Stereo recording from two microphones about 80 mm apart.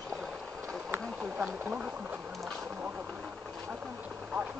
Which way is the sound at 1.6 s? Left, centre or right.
Centre.